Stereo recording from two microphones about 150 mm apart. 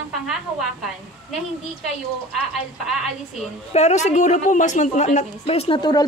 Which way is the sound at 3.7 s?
50° left (ahead or behind).